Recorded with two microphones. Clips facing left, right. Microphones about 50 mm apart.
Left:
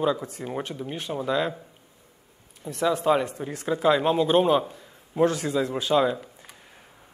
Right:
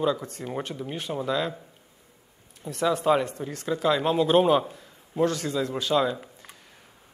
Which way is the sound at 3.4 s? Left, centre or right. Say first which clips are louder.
Left 2 dB; centre.